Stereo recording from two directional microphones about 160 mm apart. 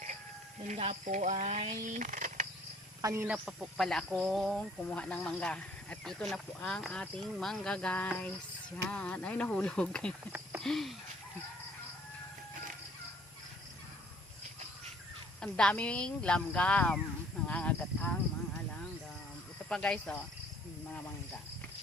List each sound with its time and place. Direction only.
0.7 s speech: 45° right (ahead or behind)
3.0 s speech: 20° right (ahead or behind)
3.2 s speech: 5° right (ahead or behind)
10.6 s a sound: centre (ahead or behind)
15.4 s speech: 5° left (ahead or behind)
17.4 s a sound: 10° left (ahead or behind)
19.6 s speech: 5° left (ahead or behind)